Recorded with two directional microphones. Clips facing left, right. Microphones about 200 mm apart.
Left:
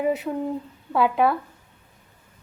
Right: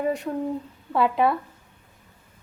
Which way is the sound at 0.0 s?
5° left (ahead or behind).